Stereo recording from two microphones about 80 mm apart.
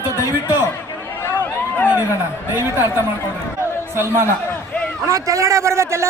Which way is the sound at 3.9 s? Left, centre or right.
Right.